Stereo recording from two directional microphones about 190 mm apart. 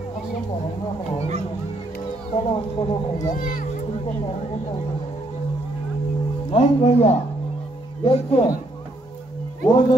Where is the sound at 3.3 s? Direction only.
45° left (ahead or behind).